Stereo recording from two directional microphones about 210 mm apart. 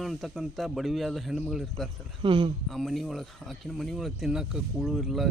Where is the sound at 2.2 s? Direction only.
25° right (ahead or behind).